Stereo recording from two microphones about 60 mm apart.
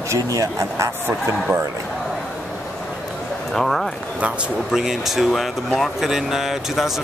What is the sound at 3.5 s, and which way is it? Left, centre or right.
Speech, centre.